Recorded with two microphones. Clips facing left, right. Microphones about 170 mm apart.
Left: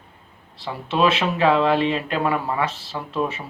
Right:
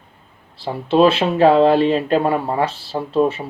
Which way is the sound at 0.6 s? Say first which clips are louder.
Right 6 dB; 30° right (ahead or behind).